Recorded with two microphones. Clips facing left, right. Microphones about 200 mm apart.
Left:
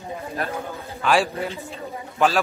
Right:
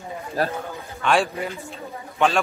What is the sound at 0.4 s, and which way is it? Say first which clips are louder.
Speech: right 5 dB; 35° right (ahead or behind).